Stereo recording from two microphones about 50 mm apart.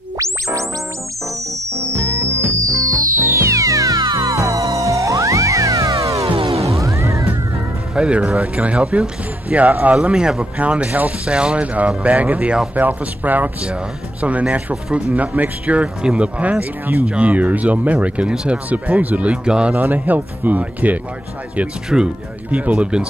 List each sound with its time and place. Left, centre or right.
1.2 s music: right
7.9 s speech: right
10.0 s speech: centre
10.6 s speech: right
11.2 s speech: right
12.7 s speech: right
17.0 s speech: right
18.3 s speech: centre
18.7 s speech: right
19.7 s speech: right
21.8 s speech: centre
22.5 s speech: right